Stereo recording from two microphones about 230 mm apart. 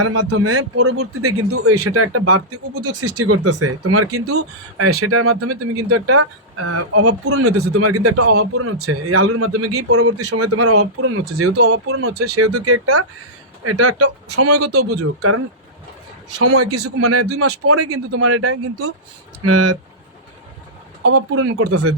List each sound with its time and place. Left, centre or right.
0.0 s a man's voice: right
16.4 s a man's voice: right
19.5 s speech: right
21.0 s a man's voice: right